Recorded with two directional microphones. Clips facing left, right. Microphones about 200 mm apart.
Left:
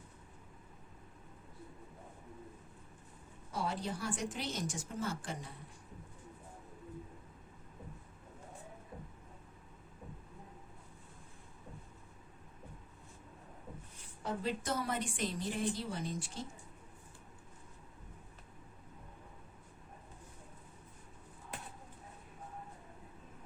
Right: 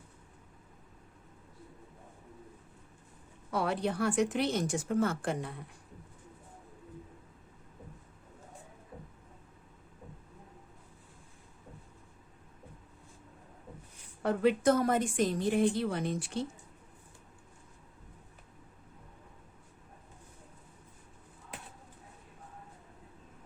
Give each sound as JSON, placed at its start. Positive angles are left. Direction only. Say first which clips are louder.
{"t": 3.5, "sound": "a woman's voice", "louder": "right 7 dB", "side_deg": -65}
{"t": 14.2, "sound": "a woman's voice", "louder": "right 10 dB", "side_deg": -65}